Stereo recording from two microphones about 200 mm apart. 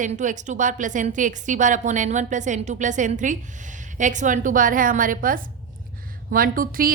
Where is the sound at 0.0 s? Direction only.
40° right (ahead or behind).